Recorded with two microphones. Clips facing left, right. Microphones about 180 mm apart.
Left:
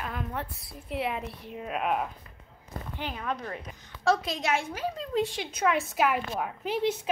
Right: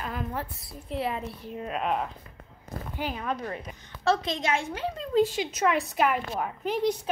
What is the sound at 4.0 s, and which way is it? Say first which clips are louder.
A woman's voice: right 1 dB; 10° left (ahead or behind).